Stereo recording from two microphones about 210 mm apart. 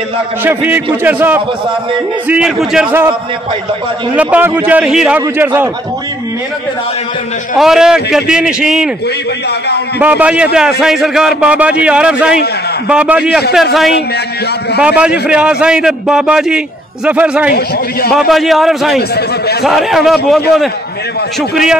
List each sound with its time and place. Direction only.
0.4 s a man's voice: 10° right (ahead or behind)
7.5 s a man's voice: centre (ahead or behind)
9.9 s a man's voice: 5° right (ahead or behind)
14.8 s a man's voice: 5° right (ahead or behind)
17.5 s a man's voice: 45° left (ahead or behind)
18.1 s a man's voice: centre (ahead or behind)
18.9 s a man's voice: 50° left (ahead or behind)
19.6 s a man's voice: centre (ahead or behind)